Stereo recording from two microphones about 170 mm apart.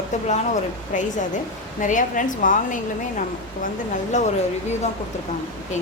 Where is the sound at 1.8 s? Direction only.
50° left (ahead or behind).